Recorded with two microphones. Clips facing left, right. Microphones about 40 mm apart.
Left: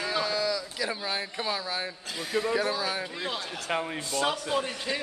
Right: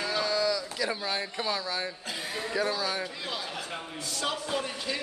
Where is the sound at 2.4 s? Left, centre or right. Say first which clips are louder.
Right 1 dB; centre.